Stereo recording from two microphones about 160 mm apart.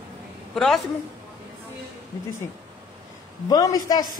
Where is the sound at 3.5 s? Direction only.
25° left (ahead or behind).